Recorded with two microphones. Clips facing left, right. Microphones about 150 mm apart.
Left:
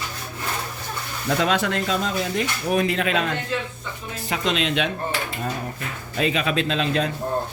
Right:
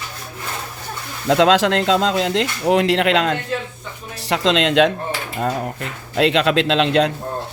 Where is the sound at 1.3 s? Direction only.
90° right.